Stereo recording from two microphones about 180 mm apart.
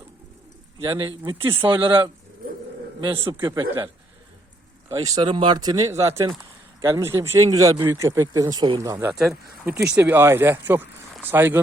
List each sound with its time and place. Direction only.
0.9 s speech: 25° right (ahead or behind)
1.4 s speech: 15° right (ahead or behind)
3.0 s speech: 30° right (ahead or behind)
4.9 s speech: 20° right (ahead or behind)